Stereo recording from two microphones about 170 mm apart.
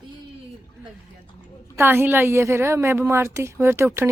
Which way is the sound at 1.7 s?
15° right (ahead or behind).